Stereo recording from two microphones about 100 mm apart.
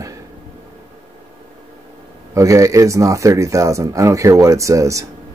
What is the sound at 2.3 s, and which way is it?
Speech, 35° right (ahead or behind).